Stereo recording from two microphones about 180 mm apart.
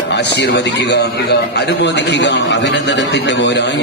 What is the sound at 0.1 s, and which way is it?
A man's voice, 70° left (ahead or behind).